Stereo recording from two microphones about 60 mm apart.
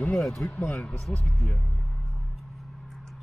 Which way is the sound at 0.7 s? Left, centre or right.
Centre.